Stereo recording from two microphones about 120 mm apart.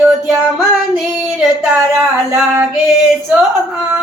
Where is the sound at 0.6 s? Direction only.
Centre (ahead or behind).